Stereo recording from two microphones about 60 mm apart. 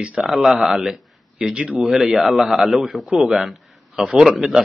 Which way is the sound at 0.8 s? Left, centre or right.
Centre.